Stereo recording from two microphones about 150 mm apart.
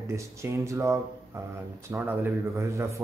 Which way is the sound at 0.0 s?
20° right (ahead or behind).